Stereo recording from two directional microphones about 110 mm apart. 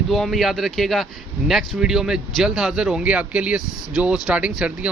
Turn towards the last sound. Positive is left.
turn(degrees=-10)  # may be behind; listen again after turning